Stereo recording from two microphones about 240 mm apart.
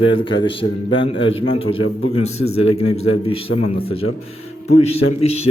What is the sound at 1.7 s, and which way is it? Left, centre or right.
Speech, left.